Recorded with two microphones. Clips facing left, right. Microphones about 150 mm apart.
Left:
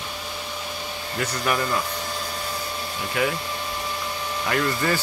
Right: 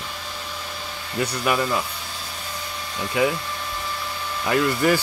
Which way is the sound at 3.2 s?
20° right (ahead or behind).